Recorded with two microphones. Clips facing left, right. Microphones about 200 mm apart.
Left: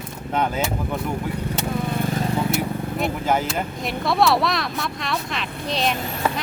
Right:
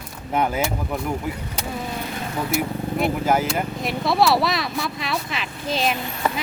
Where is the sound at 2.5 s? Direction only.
Centre (ahead or behind).